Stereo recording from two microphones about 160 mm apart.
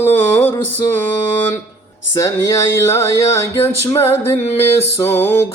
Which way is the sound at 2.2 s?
20° left (ahead or behind).